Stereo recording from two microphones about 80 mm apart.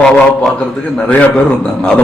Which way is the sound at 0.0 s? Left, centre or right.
Centre.